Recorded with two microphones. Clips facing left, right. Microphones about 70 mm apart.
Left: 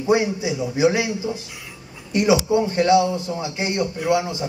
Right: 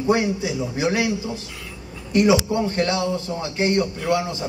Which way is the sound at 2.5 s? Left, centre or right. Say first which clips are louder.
Left 5 dB; centre.